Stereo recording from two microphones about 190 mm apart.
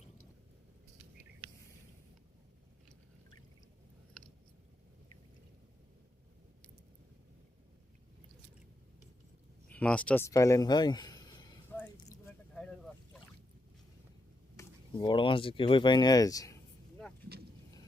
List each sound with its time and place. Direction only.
9.6 s speech: 5° left (ahead or behind)
14.5 s speech: 20° left (ahead or behind)